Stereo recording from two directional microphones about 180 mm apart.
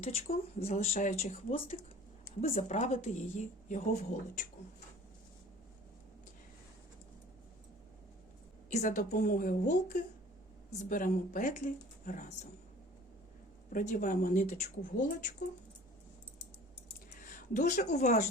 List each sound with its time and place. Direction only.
0.0 s a woman's voice: 35° left (ahead or behind)
8.7 s speech: 45° left (ahead or behind)
13.7 s speech: 50° left (ahead or behind)
17.1 s a sound: 45° left (ahead or behind)
17.9 s a woman's voice: 40° left (ahead or behind)